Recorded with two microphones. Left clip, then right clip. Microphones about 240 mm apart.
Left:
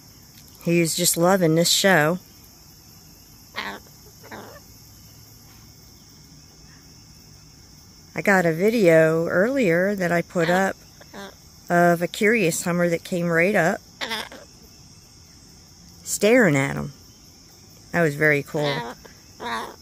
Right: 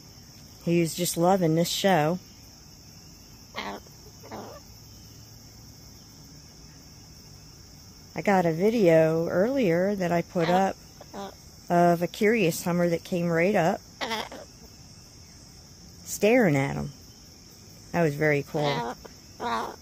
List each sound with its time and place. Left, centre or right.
0.7 s speech: left
3.5 s a sound: centre
8.1 s speech: left
11.1 s cricket: centre
11.6 s speech: left
13.9 s a sound: centre
16.1 s speech: left
17.9 s speech: centre
18.6 s speech: centre